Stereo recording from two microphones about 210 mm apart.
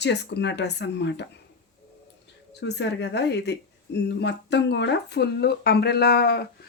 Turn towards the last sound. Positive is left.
turn(degrees=50)  # may be behind; listen again after turning